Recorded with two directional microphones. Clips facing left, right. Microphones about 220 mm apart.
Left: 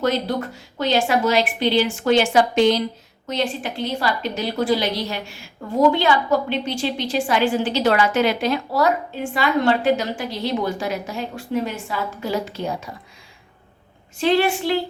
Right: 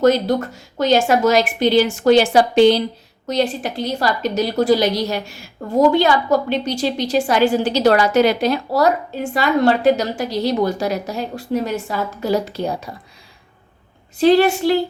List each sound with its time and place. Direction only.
0.0 s a woman's voice: 45° right (ahead or behind)
14.2 s a woman's voice: 40° right (ahead or behind)